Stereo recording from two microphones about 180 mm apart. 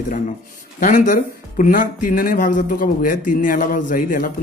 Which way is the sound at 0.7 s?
45° left (ahead or behind).